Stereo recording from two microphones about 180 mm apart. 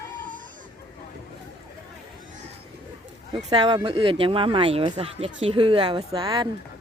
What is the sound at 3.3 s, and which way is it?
Speech, 25° right (ahead or behind).